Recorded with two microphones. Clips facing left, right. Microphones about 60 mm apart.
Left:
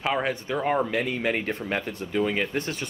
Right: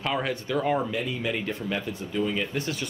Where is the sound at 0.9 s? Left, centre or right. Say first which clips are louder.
Left 3 dB; left.